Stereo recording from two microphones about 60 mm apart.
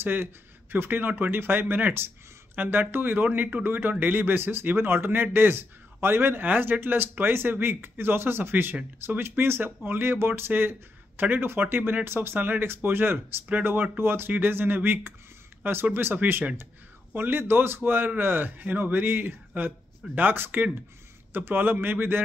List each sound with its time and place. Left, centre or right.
0.0 s speech: right